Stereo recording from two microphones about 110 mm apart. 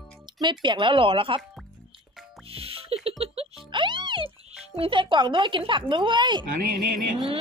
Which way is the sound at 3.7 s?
45° right (ahead or behind).